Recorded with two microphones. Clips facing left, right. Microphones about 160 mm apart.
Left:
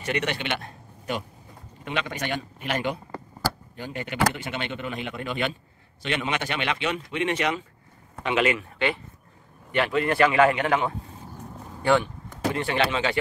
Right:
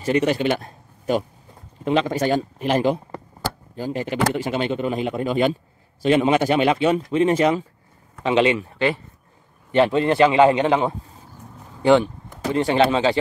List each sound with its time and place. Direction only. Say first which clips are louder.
0.1 s speech: right 9 dB; 35° right (ahead or behind)
1.9 s a man's voice: right 10 dB; 35° right (ahead or behind)
12.5 s a man's voice: right 9 dB; 30° right (ahead or behind)